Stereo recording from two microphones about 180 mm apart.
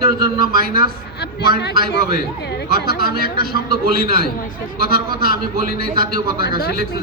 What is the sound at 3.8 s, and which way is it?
A man's voice, 55° right (ahead or behind).